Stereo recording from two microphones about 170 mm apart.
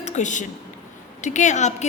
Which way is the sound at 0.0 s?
45° left (ahead or behind).